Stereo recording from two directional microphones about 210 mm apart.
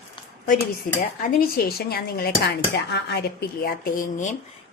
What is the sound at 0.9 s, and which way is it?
Speech, 40° left (ahead or behind).